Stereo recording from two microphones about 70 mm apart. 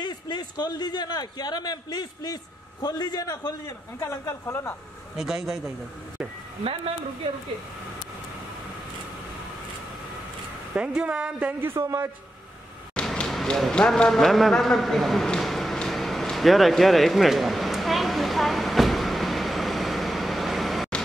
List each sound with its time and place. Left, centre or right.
0.0 s a man's voice: left
5.1 s speech: centre
10.7 s speech: centre
11.6 s a man's voice: right
12.9 s a sound: centre